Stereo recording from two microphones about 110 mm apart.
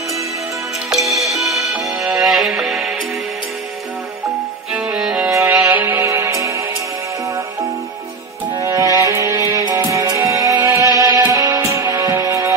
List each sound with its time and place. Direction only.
0.9 s music: centre (ahead or behind)
4.9 s music: 5° right (ahead or behind)
5.3 s music: 25° right (ahead or behind)
5.7 s music: 15° right (ahead or behind)
6.0 s music: 30° right (ahead or behind)
8.5 s music: 30° right (ahead or behind)